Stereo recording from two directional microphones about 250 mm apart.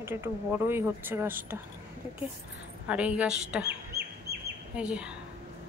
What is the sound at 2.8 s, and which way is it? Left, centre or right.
Speech, centre.